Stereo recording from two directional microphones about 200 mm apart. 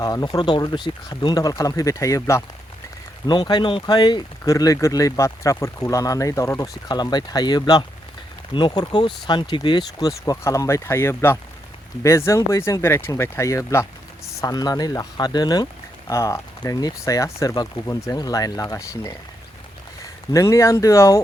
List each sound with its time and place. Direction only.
0.0 s speech: 20° left (ahead or behind)
20.3 s speech: 15° left (ahead or behind)